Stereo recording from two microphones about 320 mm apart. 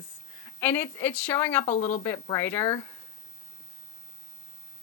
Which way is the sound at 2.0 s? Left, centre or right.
Centre.